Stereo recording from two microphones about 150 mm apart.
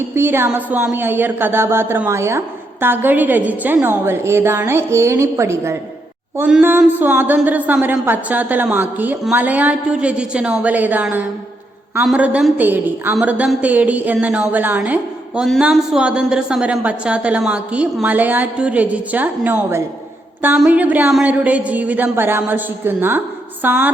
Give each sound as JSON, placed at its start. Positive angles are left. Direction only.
{"t": 0.2, "sound": "a woman's voice", "side_deg": -15}